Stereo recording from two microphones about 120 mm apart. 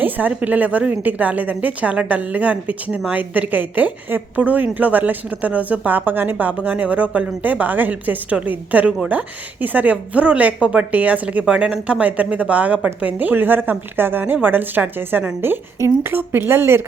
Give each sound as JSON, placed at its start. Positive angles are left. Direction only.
{"t": 0.0, "sound": "a woman's voice", "side_deg": -15}